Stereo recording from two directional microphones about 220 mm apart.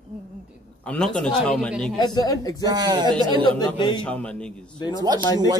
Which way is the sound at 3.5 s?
20° left (ahead or behind).